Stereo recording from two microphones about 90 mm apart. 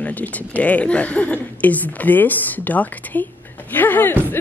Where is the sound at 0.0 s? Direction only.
15° left (ahead or behind).